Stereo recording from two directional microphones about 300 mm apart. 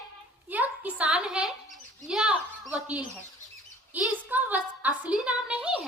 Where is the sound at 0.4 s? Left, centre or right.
Centre.